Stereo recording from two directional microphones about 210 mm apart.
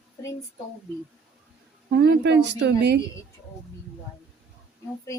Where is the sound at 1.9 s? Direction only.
55° right (ahead or behind).